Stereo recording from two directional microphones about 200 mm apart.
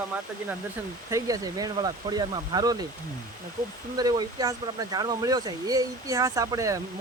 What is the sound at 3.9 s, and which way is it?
Speech, 20° right (ahead or behind).